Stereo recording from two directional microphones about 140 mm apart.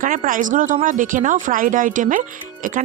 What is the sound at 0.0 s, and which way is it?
Speech, 75° right (ahead or behind).